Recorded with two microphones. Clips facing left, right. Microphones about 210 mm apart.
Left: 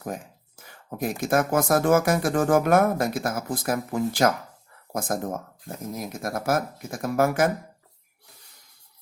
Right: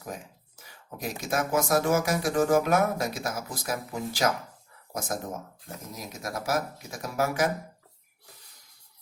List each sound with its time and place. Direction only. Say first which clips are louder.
0.0 s speech: left 5 dB; 50° left (ahead or behind)